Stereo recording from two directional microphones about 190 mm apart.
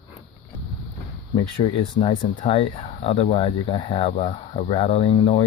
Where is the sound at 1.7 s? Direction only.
30° left (ahead or behind).